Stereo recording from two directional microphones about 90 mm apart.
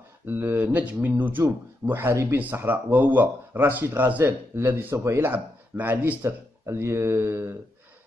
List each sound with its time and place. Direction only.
0.3 s speech: 20° right (ahead or behind)
4.9 s speech: 35° right (ahead or behind)
5.2 s speech: 20° right (ahead or behind)